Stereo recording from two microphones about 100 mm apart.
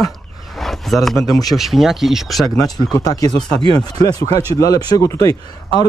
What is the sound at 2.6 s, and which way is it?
Speech, 40° left (ahead or behind).